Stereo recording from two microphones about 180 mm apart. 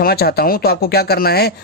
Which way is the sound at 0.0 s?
60° left (ahead or behind).